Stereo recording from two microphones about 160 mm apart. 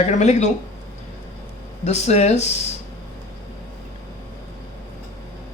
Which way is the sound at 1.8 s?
45° left (ahead or behind).